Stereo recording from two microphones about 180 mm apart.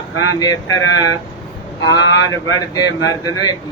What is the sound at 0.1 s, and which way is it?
Speech, 90° left.